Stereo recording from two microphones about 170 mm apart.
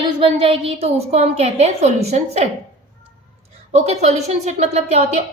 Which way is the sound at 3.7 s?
40° right (ahead or behind).